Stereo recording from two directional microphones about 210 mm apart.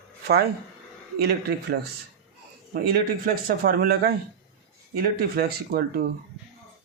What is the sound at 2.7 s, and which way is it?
Speech, 45° right (ahead or behind).